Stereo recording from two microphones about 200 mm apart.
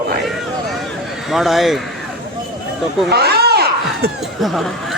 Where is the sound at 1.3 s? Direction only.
Centre (ahead or behind).